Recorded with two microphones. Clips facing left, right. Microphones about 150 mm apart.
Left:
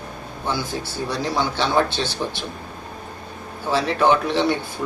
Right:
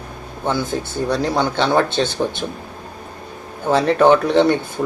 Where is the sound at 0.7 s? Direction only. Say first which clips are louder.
Right 6 dB; 55° right (ahead or behind).